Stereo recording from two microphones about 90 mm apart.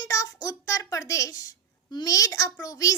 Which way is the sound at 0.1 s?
40° left (ahead or behind).